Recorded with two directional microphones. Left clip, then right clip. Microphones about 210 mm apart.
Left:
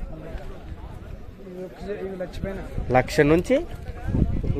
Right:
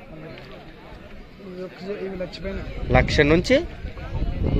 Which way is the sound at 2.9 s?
20° left (ahead or behind).